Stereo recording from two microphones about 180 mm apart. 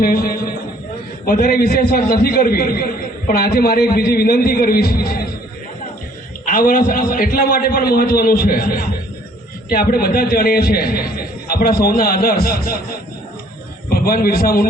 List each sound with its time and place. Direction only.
0.0 s a sound: 55° left (ahead or behind)
1.2 s a man's voice: 55° left (ahead or behind)
6.4 s a man's voice: 50° left (ahead or behind)
13.9 s a man's voice: 55° left (ahead or behind)